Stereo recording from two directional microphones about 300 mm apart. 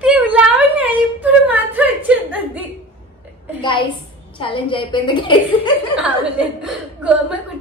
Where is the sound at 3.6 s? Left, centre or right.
Centre.